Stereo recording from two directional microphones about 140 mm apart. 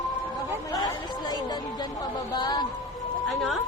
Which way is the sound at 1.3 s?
30° left (ahead or behind).